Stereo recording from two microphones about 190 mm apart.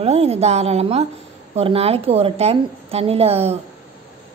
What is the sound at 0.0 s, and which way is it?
A woman's voice, 35° right (ahead or behind).